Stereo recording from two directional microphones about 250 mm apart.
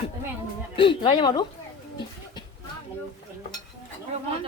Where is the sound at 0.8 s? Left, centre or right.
Centre.